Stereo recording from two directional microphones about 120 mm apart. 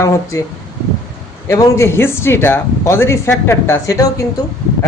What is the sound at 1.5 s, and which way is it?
A man's voice, 25° left (ahead or behind).